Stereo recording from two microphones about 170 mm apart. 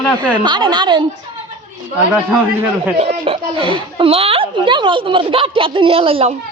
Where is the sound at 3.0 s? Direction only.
35° right (ahead or behind).